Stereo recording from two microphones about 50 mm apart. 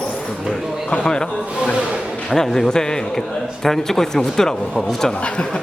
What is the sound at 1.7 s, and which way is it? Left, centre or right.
Speech, centre.